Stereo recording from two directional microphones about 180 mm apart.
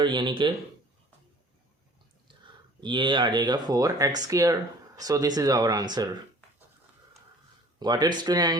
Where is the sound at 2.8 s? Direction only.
25° right (ahead or behind).